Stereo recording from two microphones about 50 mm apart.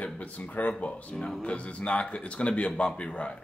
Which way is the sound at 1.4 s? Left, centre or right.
Left.